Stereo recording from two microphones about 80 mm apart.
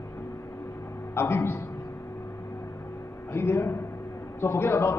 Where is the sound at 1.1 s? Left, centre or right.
Left.